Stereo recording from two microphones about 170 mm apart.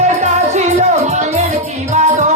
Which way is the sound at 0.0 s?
45° right (ahead or behind).